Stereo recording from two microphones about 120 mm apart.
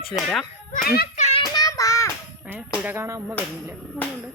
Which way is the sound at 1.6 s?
30° left (ahead or behind).